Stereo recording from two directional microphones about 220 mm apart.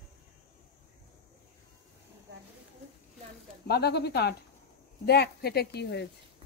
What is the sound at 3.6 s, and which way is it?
Speech, 45° left (ahead or behind).